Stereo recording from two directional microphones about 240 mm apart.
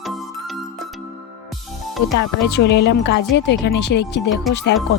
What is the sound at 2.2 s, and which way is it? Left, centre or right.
Speech, left.